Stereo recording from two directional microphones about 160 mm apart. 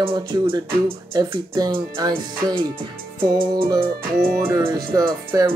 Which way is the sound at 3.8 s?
65° right (ahead or behind).